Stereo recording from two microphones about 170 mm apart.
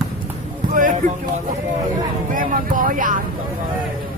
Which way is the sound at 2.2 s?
55° right (ahead or behind).